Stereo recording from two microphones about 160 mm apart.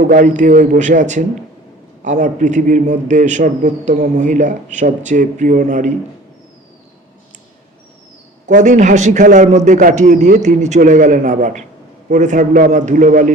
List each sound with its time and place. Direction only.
0.0 s a man's voice: 55° right (ahead or behind)
8.4 s a man's voice: 50° right (ahead or behind)